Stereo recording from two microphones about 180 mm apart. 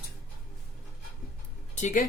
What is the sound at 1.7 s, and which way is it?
Speech, 40° left (ahead or behind).